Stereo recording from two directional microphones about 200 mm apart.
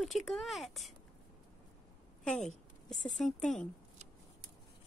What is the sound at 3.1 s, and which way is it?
Speech, 40° left (ahead or behind).